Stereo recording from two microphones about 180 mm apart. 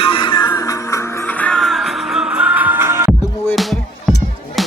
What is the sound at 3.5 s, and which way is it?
Music, centre (ahead or behind).